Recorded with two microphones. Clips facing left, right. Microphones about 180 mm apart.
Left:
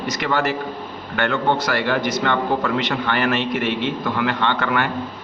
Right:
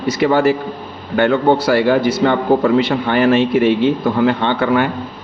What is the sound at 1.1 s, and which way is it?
Speech, 45° right (ahead or behind).